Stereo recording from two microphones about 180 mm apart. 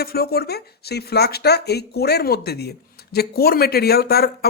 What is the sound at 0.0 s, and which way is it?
Speech, 60° left (ahead or behind).